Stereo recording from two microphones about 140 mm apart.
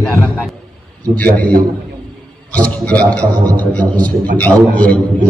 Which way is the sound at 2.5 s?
10° left (ahead or behind).